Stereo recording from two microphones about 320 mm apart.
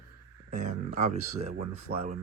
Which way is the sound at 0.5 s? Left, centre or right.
Right.